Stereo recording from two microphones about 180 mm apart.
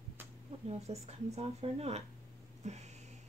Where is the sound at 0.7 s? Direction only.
35° right (ahead or behind).